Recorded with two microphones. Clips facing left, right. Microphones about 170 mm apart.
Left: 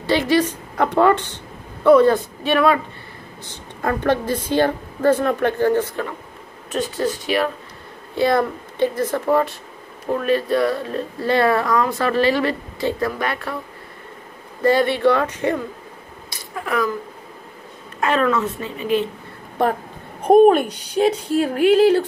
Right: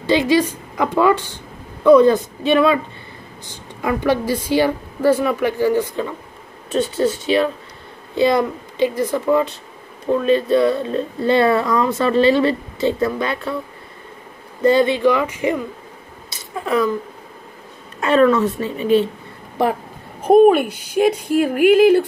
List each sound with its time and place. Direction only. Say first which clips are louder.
0.0 s speech: right 2 dB; 15° right (ahead or behind)
3.4 s a woman's voice: right 1 dB; 10° right (ahead or behind)
6.7 s a woman's voice: right 4 dB; 25° right (ahead or behind)
14.6 s a woman's voice: right 2 dB; 20° right (ahead or behind)
16.3 s a sound: right 4 dB; 25° right (ahead or behind)
18.1 s a woman's voice: right 7 dB; 35° right (ahead or behind)
20.2 s a woman's voice: right 1 dB; 5° right (ahead or behind)